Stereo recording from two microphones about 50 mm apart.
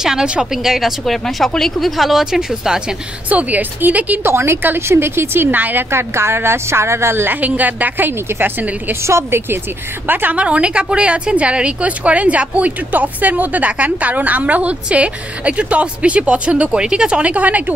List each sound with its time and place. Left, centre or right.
0.0 s a woman's voice: centre
3.3 s a woman's voice: right
4.2 s a woman's voice: right
5.6 s a woman's voice: right
5.9 s a woman's voice: right
7.2 s a woman's voice: right
9.0 s a woman's voice: right
10.0 s a woman's voice: right
10.3 s a woman's voice: right
17.3 s a woman's voice: right